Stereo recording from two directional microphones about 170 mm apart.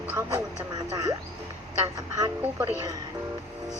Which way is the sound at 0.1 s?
10° right (ahead or behind).